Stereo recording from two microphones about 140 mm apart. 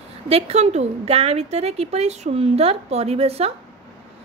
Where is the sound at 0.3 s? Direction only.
50° right (ahead or behind).